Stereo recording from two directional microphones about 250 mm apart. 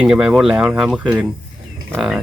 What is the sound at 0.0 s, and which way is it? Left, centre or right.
Speech, centre.